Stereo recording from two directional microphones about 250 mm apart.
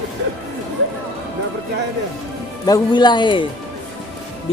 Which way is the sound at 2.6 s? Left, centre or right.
Centre.